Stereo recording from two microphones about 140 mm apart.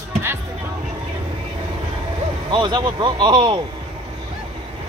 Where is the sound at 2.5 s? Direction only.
35° right (ahead or behind).